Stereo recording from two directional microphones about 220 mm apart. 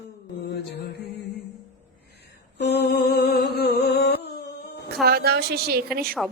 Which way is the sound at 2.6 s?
50° left (ahead or behind).